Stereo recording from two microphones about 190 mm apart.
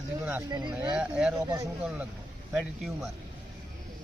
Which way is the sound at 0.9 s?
5° right (ahead or behind).